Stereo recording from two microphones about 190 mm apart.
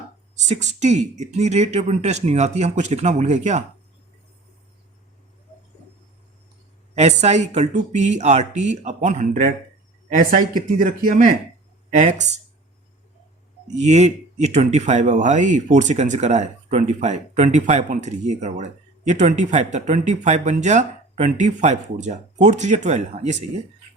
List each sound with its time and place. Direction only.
0.3 s speech: 35° right (ahead or behind)
6.9 s speech: 35° right (ahead or behind)
13.7 s speech: 35° right (ahead or behind)